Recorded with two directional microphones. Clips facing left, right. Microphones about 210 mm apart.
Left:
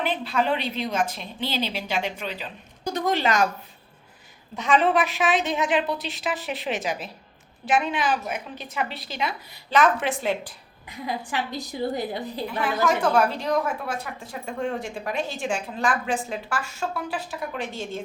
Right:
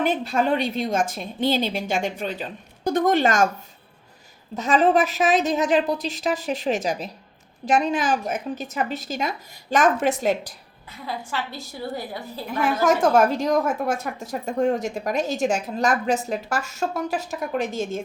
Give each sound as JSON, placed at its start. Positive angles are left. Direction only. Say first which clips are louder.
{"t": 0.0, "sound": "a woman's voice", "louder": "right 3 dB", "side_deg": -45}
{"t": 4.5, "sound": "a woman's voice", "louder": "right 3 dB", "side_deg": -40}
{"t": 10.8, "sound": "a woman's voice", "louder": "left 2 dB", "side_deg": 15}
{"t": 12.5, "sound": "a woman's voice", "louder": "right 4 dB", "side_deg": -45}